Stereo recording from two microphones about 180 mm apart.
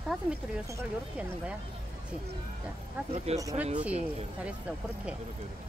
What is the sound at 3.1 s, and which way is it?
Speech, 35° right (ahead or behind).